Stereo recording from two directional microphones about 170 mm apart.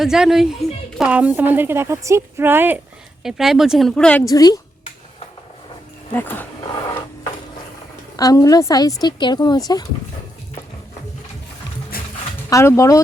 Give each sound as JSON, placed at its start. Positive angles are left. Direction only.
{"t": 0.0, "sound": "a woman's voice", "side_deg": -5}
{"t": 4.3, "sound": "a woman's voice", "side_deg": 20}
{"t": 6.1, "sound": "speech", "side_deg": 10}
{"t": 8.1, "sound": "a woman's voice", "side_deg": 20}
{"t": 11.9, "sound": "music", "side_deg": 60}
{"t": 12.5, "sound": "speech", "side_deg": 15}